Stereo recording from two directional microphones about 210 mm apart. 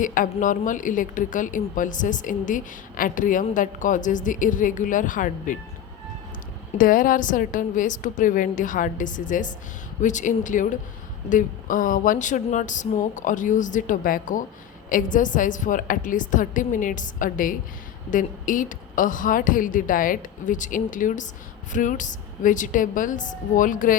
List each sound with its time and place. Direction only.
0.0 s a woman's voice: 40° left (ahead or behind)
6.7 s a woman's voice: 40° left (ahead or behind)